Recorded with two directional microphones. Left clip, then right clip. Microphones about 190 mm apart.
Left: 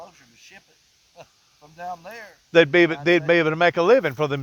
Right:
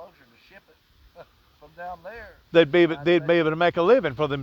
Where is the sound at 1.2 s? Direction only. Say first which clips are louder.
Even; 45° left (ahead or behind).